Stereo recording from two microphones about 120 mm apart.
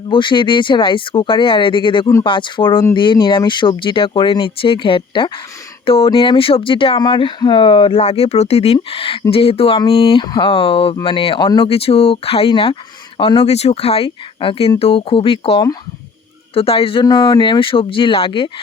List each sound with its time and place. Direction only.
0.1 s speech: 40° left (ahead or behind)
11.6 s speech: 50° left (ahead or behind)
13.5 s speech: 60° left (ahead or behind)
17.1 s speech: 35° left (ahead or behind)